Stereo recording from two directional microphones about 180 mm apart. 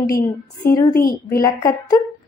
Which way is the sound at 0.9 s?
55° left (ahead or behind).